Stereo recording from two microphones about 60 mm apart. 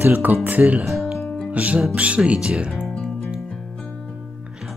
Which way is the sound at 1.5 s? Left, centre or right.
Right.